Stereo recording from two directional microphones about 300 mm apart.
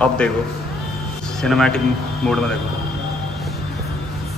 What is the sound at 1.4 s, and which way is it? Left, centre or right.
Speech, centre.